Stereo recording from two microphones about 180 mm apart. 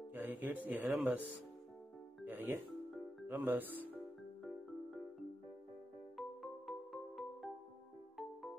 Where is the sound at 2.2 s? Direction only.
10° right (ahead or behind).